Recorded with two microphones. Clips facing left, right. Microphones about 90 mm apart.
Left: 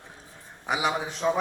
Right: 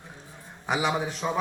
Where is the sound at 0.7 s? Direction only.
5° left (ahead or behind).